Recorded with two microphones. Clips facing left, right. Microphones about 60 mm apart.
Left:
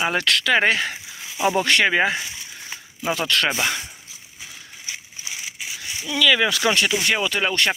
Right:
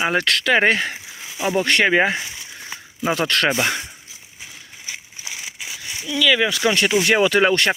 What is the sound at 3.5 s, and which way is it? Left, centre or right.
Speech, right.